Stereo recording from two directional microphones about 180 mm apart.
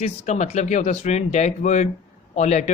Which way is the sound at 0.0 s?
40° left (ahead or behind).